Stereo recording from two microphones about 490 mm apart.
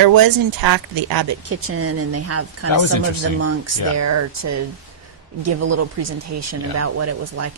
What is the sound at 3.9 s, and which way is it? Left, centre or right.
Speech, right.